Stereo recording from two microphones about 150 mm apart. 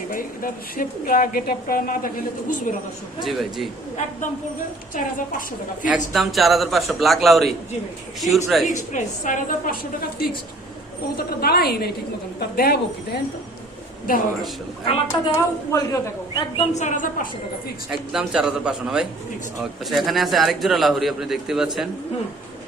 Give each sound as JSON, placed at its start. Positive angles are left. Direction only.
{"t": 0.1, "sound": "a woman's voice", "side_deg": 70}
{"t": 3.2, "sound": "a man's voice", "side_deg": 0}
{"t": 6.1, "sound": "a man's voice", "side_deg": 0}
{"t": 8.7, "sound": "a woman's voice", "side_deg": 55}
{"t": 11.2, "sound": "a woman's voice", "side_deg": 90}
{"t": 14.1, "sound": "a woman's voice", "side_deg": 70}
{"t": 14.8, "sound": "a woman's voice", "side_deg": 40}
{"t": 15.7, "sound": "a man's voice", "side_deg": 20}
{"t": 16.6, "sound": "a woman's voice", "side_deg": 50}
{"t": 18.1, "sound": "a man's voice", "side_deg": -5}